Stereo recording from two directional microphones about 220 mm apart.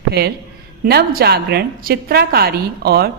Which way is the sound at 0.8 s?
45° right (ahead or behind).